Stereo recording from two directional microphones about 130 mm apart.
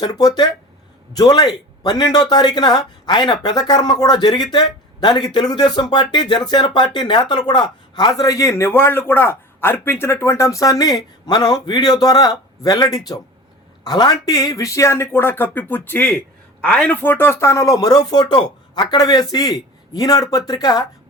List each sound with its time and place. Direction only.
0.0 s speech: 30° left (ahead or behind)